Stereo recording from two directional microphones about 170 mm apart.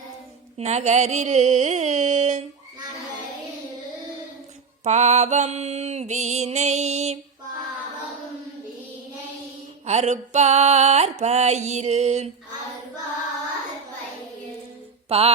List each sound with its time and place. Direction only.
0.6 s music: 40° right (ahead or behind)
4.8 s music: 45° right (ahead or behind)
9.8 s music: 40° right (ahead or behind)
15.1 s music: 35° right (ahead or behind)